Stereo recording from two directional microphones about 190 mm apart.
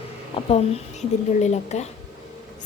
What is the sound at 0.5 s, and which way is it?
A woman's voice, 35° left (ahead or behind).